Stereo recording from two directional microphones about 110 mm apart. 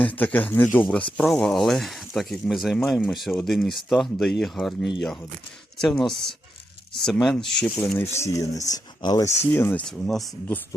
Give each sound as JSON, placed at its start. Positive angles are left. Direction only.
{"t": 0.0, "sound": "speech", "side_deg": 15}
{"t": 7.9, "sound": "speech", "side_deg": 25}
{"t": 9.5, "sound": "speech", "side_deg": 20}
{"t": 9.8, "sound": "speech", "side_deg": 5}